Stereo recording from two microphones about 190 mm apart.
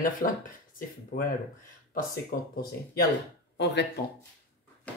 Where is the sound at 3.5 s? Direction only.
65° left (ahead or behind).